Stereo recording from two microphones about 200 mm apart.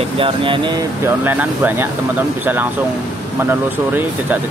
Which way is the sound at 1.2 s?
10° right (ahead or behind).